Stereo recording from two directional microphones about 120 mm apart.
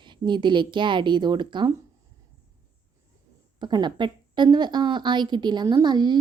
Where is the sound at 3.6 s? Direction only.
40° right (ahead or behind).